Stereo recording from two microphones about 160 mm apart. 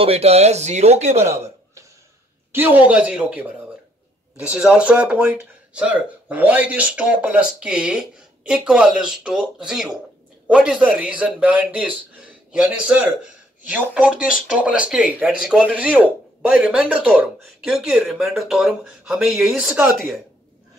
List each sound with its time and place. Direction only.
0.0 s speech: 40° right (ahead or behind)
1.3 s a sound: 15° right (ahead or behind)
2.5 s speech: 10° right (ahead or behind)